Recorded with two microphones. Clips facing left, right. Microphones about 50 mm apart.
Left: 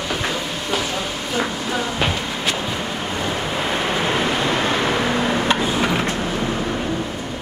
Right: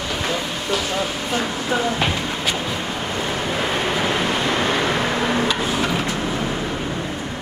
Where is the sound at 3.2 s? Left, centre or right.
Left.